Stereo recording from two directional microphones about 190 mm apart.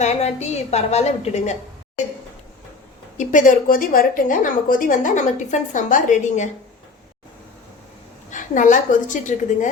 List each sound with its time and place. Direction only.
0.0 s a woman's voice: 35° left (ahead or behind)
3.2 s a woman's voice: 45° left (ahead or behind)
8.3 s a woman's voice: 40° left (ahead or behind)